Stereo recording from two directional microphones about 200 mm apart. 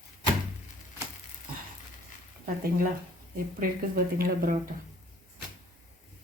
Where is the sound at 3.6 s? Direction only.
45° right (ahead or behind).